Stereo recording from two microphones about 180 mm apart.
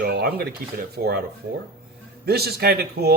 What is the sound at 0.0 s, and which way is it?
Speech, 60° right (ahead or behind).